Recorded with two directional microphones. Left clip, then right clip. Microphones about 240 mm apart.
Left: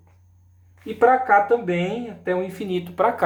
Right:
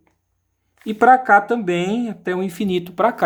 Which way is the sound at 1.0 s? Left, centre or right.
Right.